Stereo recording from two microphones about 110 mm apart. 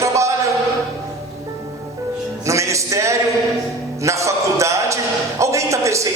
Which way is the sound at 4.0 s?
30° right (ahead or behind).